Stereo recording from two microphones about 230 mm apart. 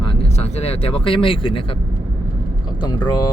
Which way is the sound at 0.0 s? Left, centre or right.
Left.